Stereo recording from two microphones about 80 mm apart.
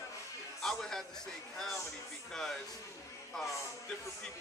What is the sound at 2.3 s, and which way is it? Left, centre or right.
Speech, centre.